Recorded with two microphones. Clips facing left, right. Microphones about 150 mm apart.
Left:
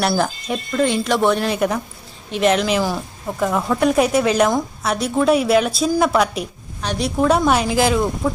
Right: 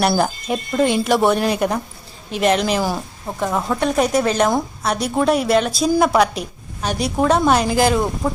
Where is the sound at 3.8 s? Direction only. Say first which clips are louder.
Left 2 dB; 5° left (ahead or behind).